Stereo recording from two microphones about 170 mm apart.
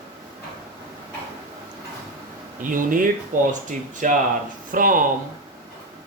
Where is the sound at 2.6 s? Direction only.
50° right (ahead or behind).